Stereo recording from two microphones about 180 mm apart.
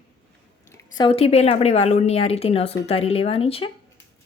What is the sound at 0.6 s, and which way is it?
A woman's voice, 20° left (ahead or behind).